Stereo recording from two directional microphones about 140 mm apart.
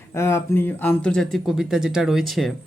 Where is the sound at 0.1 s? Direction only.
20° left (ahead or behind); by 2.5 s centre (ahead or behind).